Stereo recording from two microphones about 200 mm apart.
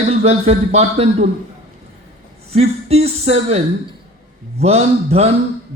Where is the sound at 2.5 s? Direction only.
30° right (ahead or behind).